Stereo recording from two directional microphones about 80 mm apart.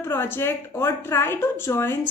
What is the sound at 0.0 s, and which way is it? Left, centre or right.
Speech, left.